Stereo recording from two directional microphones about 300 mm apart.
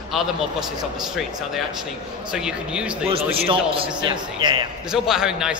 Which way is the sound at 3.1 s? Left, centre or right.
Centre.